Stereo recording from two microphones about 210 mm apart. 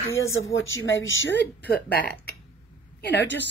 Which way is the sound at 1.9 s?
45° left (ahead or behind).